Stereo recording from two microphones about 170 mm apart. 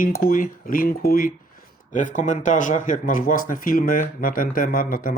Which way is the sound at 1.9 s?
45° left (ahead or behind).